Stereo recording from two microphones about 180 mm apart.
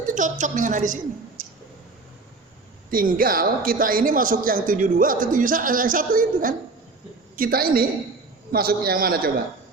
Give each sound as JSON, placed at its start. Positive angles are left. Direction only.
{"t": 0.0, "sound": "a man's voice", "side_deg": -45}
{"t": 2.9, "sound": "a man's voice", "side_deg": -50}